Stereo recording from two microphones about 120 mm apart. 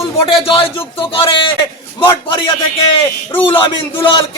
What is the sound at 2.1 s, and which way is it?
A man's voice, 45° left (ahead or behind).